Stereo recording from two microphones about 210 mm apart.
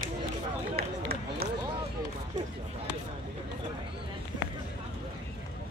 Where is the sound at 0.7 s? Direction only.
45° right (ahead or behind).